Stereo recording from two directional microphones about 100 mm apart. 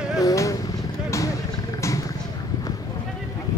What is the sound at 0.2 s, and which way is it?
Vehicle, 35° left (ahead or behind).